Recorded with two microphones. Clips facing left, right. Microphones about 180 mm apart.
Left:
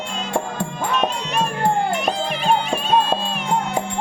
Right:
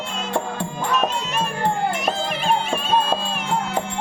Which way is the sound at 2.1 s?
Centre (ahead or behind).